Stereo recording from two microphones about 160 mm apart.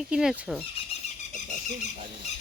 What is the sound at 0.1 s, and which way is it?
Speech, 5° right (ahead or behind).